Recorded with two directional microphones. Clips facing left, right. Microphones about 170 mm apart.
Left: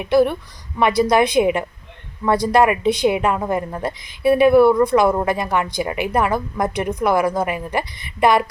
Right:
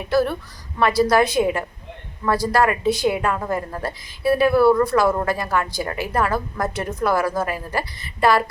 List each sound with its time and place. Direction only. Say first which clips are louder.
0.0 s speech: left 4 dB; 20° left (ahead or behind)